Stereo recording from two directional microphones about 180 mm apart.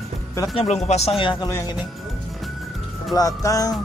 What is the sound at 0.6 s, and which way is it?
Speech, 35° left (ahead or behind).